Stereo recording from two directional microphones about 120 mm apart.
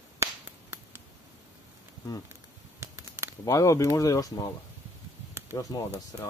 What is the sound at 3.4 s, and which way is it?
Speech, 25° left (ahead or behind).